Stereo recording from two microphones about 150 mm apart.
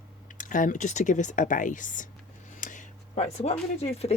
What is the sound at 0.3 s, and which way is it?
Speech, 60° left (ahead or behind).